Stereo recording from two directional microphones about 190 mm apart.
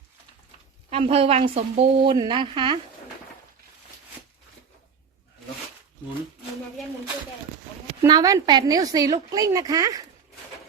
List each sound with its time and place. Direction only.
0.9 s a woman's voice: 30° right (ahead or behind)
8.0 s a woman's voice: 20° right (ahead or behind)